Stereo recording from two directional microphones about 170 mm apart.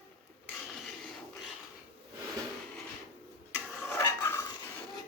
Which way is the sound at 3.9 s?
15° left (ahead or behind).